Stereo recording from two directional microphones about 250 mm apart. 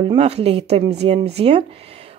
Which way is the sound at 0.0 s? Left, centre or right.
Right.